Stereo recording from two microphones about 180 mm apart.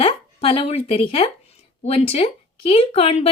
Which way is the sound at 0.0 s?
35° left (ahead or behind).